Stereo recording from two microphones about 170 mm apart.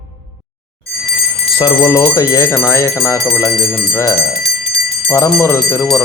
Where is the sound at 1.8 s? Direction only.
15° left (ahead or behind).